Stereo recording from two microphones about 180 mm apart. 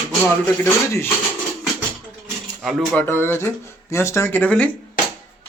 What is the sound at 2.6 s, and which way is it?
Speech, centre (ahead or behind).